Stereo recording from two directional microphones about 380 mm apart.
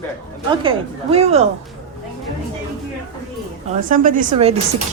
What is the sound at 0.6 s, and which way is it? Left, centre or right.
Speech, centre.